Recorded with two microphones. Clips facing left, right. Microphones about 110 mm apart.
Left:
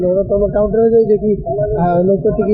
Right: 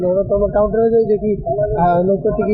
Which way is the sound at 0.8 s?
5° right (ahead or behind).